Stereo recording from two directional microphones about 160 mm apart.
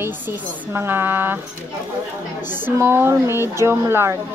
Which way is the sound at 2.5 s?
15° right (ahead or behind).